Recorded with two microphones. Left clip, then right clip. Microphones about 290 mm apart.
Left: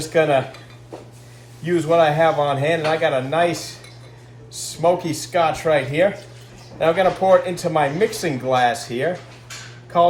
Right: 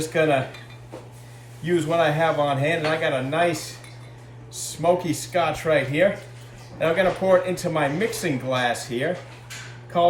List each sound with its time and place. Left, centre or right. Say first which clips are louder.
0.0 s speech: left 4 dB; centre
1.6 s speech: left 5 dB; centre